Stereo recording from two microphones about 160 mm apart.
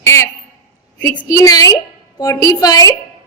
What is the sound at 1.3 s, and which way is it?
A woman's voice, 25° left (ahead or behind).